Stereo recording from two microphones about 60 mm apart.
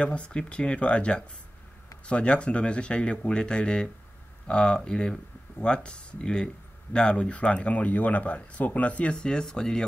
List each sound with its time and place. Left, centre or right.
0.0 s speech: centre